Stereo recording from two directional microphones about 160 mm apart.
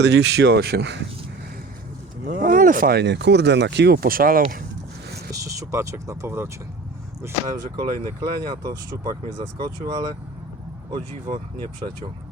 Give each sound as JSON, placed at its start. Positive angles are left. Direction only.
{"t": 0.0, "sound": "speech", "side_deg": -90}
{"t": 2.3, "sound": "speech", "side_deg": -60}
{"t": 5.3, "sound": "speech", "side_deg": -20}